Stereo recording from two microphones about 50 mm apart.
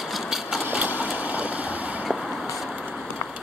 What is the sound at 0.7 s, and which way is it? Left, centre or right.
Vehicle, right.